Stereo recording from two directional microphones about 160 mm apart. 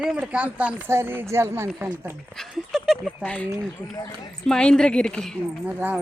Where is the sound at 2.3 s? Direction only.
Centre (ahead or behind).